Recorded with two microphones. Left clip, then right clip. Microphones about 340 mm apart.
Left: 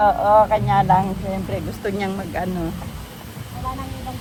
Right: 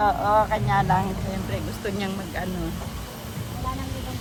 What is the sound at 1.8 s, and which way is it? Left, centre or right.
Speech, centre.